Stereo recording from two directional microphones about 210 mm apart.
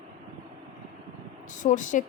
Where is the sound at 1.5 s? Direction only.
35° left (ahead or behind).